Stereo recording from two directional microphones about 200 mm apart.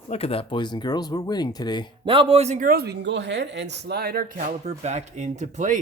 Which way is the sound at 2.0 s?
25° right (ahead or behind).